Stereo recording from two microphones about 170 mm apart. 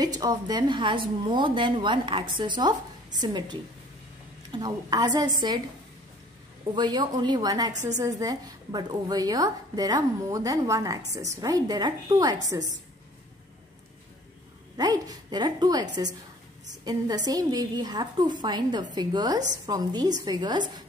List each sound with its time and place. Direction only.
0.0 s a woman's voice: 25° right (ahead or behind)
6.7 s a woman's voice: 25° right (ahead or behind)
14.8 s a woman's voice: 20° right (ahead or behind)